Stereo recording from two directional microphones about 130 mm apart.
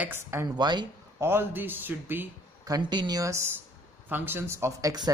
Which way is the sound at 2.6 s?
30° right (ahead or behind).